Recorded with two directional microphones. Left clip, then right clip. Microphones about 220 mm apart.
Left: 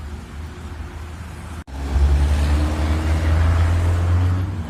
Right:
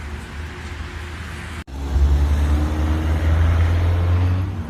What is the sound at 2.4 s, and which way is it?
Vehicle, 35° right (ahead or behind).